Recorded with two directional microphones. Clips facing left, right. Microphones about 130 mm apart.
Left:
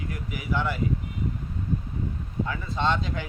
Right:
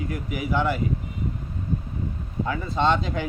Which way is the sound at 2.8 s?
20° right (ahead or behind).